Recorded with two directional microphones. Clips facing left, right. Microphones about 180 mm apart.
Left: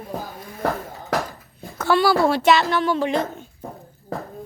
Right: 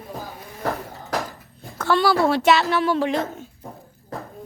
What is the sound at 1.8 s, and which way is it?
Speech, 5° left (ahead or behind).